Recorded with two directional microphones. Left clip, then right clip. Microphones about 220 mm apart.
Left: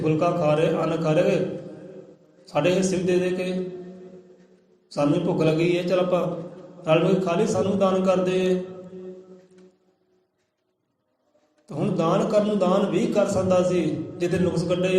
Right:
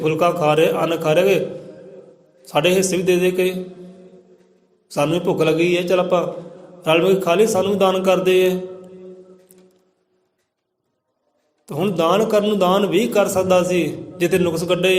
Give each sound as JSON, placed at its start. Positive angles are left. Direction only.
{"t": 0.0, "sound": "a man's voice", "side_deg": -45}
{"t": 2.4, "sound": "a man's voice", "side_deg": -45}
{"t": 4.9, "sound": "a man's voice", "side_deg": -45}
{"t": 11.6, "sound": "a man's voice", "side_deg": -45}